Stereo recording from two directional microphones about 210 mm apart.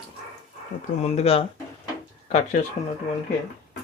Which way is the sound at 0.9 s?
30° left (ahead or behind).